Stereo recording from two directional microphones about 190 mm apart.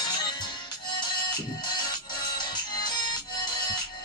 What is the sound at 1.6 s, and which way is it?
Music, 25° left (ahead or behind).